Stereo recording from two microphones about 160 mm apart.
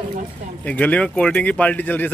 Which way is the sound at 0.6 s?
10° left (ahead or behind).